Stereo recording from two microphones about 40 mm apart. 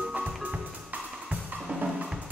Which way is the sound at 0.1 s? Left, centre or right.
Right.